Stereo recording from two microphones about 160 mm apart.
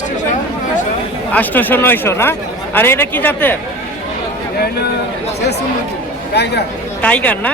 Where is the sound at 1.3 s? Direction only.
10° left (ahead or behind).